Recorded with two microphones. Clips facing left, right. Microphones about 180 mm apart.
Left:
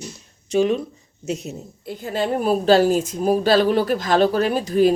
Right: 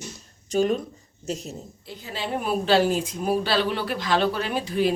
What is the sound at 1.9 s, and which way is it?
A woman's voice, 50° left (ahead or behind).